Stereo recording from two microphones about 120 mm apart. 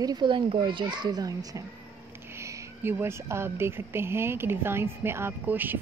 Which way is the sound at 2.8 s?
20° right (ahead or behind).